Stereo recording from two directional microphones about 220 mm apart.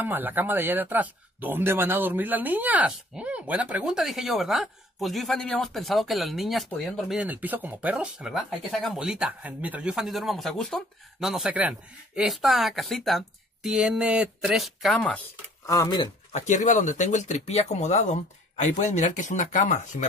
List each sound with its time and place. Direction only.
0.0 s speech: 10° right (ahead or behind); by 16.1 s 15° left (ahead or behind)
16.3 s speech: 30° left (ahead or behind)